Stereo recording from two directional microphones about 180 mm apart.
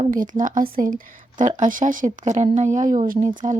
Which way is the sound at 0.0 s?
45° right (ahead or behind).